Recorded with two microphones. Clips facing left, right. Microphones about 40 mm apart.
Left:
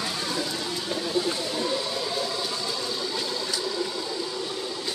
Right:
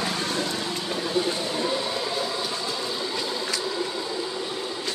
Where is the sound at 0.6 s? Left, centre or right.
Centre.